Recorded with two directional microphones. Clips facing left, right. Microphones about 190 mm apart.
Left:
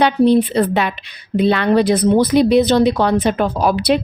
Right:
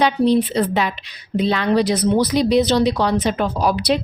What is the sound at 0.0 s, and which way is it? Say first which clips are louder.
A woman's voice: left 3 dB; 55° left (ahead or behind).